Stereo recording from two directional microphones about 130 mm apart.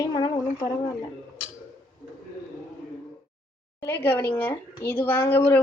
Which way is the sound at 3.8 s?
15° left (ahead or behind).